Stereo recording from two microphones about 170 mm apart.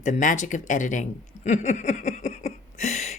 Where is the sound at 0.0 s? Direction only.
50° left (ahead or behind).